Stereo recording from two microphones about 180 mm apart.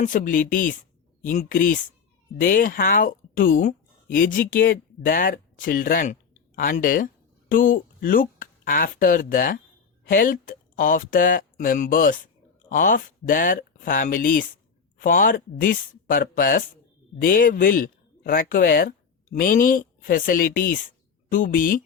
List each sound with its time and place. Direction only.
0.0 s speech: 45° left (ahead or behind)